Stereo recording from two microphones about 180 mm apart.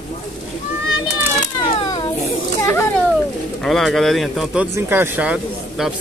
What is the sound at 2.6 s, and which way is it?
Children playing, 15° left (ahead or behind).